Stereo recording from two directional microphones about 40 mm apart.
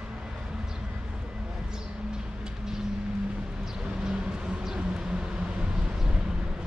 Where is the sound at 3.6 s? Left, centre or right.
Centre.